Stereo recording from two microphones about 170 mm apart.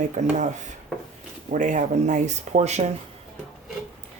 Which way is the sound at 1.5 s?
50° right (ahead or behind).